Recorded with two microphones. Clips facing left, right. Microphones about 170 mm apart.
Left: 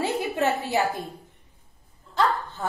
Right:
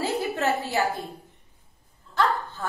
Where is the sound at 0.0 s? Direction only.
20° left (ahead or behind).